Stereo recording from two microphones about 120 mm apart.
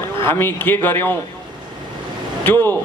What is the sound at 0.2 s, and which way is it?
Speech, 20° left (ahead or behind).